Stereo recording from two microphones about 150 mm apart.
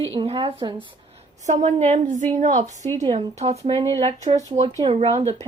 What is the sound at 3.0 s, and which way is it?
Speech, 35° right (ahead or behind).